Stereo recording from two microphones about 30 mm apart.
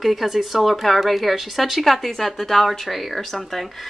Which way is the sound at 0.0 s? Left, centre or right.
Centre.